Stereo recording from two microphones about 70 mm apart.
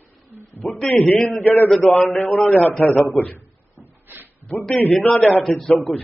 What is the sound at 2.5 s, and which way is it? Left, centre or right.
Speech, left.